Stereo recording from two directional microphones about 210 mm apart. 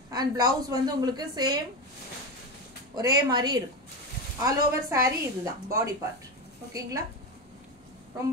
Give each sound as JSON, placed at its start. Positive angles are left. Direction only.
{"t": 0.1, "sound": "a woman's voice", "side_deg": -20}
{"t": 3.0, "sound": "a woman's voice", "side_deg": -20}